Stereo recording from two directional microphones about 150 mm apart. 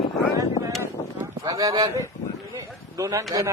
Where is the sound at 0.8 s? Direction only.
20° right (ahead or behind).